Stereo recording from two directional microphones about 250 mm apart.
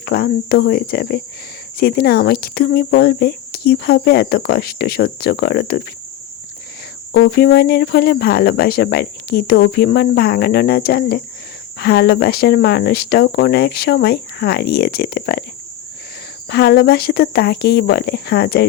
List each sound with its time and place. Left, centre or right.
0.0 s speech: left
7.1 s speech: left
16.5 s speech: left